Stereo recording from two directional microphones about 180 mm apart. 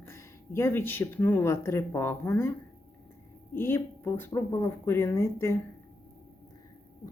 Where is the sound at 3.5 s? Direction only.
15° left (ahead or behind).